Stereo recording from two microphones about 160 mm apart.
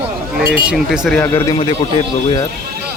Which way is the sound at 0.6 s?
5° right (ahead or behind).